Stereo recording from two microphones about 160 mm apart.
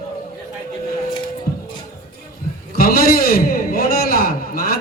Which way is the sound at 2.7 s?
70° left (ahead or behind).